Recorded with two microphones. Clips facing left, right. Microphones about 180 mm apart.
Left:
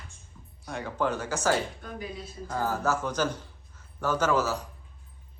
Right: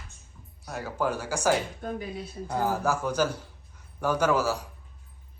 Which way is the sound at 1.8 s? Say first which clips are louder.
Right 7 dB; 50° right (ahead or behind).